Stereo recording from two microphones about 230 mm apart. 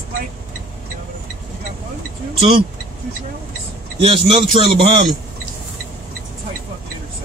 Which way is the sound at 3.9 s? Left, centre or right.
Right.